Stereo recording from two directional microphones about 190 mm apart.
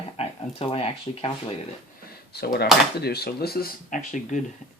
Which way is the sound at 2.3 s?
55° left (ahead or behind).